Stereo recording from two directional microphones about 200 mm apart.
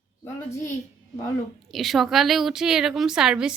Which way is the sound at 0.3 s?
10° left (ahead or behind).